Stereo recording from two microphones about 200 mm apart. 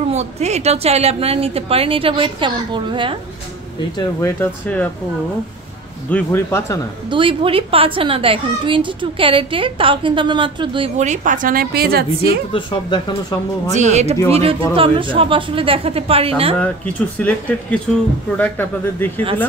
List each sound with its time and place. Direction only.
0.1 s a child's voice: 35° right (ahead or behind)
3.9 s speech: 15° left (ahead or behind)
6.0 s speech: 10° left (ahead or behind)
7.1 s a child's voice: 25° right (ahead or behind); by 12.4 s 50° right (ahead or behind)
12.5 s speech: 25° left (ahead or behind)
13.7 s a child's voice: 35° right (ahead or behind)
16.5 s speech: 5° left (ahead or behind)